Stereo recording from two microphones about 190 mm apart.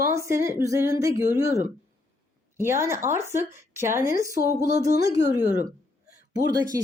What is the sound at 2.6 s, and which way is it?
Speech, 15° right (ahead or behind).